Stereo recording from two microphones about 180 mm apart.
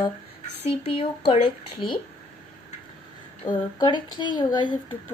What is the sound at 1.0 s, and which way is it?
Speech, 30° left (ahead or behind).